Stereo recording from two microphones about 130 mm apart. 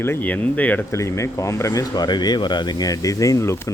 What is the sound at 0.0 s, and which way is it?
Speech, 15° left (ahead or behind).